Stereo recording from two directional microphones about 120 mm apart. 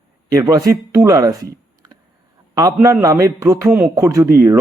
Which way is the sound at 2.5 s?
25° right (ahead or behind).